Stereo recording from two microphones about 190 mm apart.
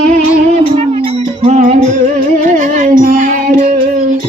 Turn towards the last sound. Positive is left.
turn(degrees=-45)  # may be behind; listen again after turning